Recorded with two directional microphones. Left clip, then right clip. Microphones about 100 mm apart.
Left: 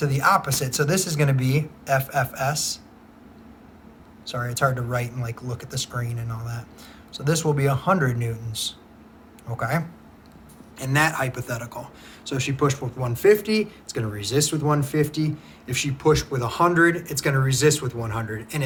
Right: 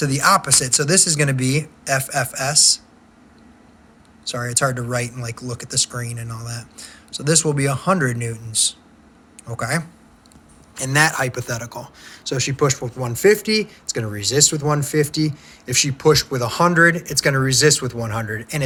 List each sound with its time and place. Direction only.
0.0 s speech: 15° right (ahead or behind)
4.3 s a man's voice: 15° right (ahead or behind)